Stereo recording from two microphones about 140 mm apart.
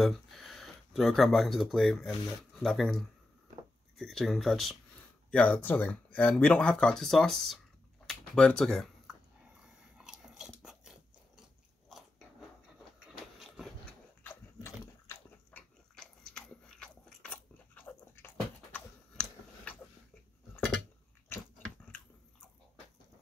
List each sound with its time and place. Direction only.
0.0 s speech: centre (ahead or behind)
8.1 s typing: 5° left (ahead or behind)
9.6 s biting: 5° right (ahead or behind)
13.0 s a sound: centre (ahead or behind)
14.2 s biting: 15° left (ahead or behind)
16.3 s biting: 5° left (ahead or behind)